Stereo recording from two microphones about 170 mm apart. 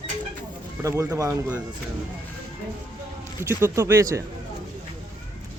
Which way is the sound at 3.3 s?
15° right (ahead or behind).